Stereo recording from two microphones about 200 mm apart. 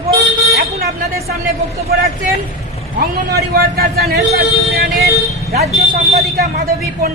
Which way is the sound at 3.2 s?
50° right (ahead or behind).